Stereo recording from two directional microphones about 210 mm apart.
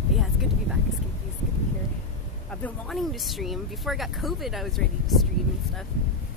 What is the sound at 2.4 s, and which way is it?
Speech, 5° left (ahead or behind).